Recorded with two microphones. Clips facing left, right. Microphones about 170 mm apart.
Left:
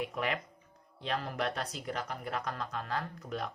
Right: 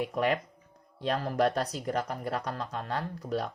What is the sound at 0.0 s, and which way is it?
Speech, 35° right (ahead or behind).